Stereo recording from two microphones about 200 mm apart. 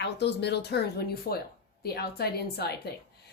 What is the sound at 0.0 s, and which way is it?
A woman's voice, 60° left (ahead or behind).